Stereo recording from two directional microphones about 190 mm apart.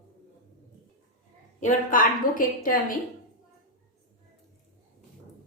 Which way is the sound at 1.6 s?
45° left (ahead or behind).